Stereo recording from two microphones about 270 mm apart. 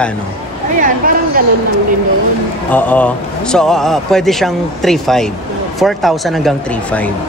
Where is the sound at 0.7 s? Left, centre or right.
Right.